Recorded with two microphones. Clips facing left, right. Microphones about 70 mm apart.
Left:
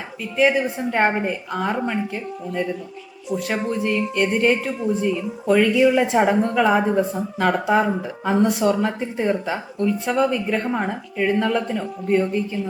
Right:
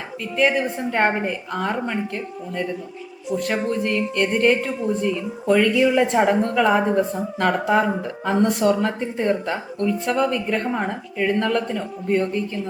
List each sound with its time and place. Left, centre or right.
0.2 s speech: centre